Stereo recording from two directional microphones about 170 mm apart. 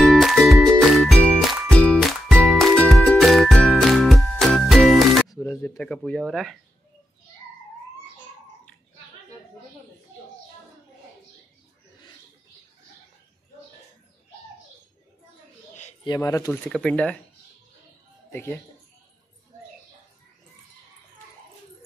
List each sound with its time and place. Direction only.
0.0 s music: centre (ahead or behind)
5.3 s speech: 10° left (ahead or behind)
16.0 s speech: 20° left (ahead or behind)
16.6 s speech: 5° left (ahead or behind)